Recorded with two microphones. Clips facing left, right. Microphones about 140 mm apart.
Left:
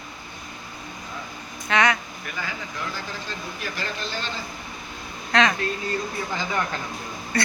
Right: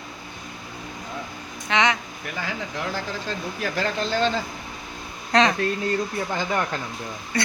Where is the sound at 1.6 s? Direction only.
20° right (ahead or behind).